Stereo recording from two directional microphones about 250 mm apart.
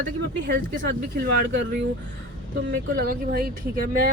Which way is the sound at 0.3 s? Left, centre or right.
Right.